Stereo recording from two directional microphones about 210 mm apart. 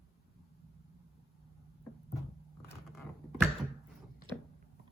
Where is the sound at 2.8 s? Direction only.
Centre (ahead or behind).